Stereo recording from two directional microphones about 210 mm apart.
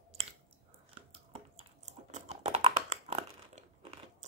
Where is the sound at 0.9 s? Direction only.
25° right (ahead or behind).